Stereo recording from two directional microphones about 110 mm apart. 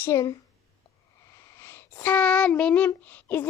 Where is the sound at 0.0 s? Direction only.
25° left (ahead or behind).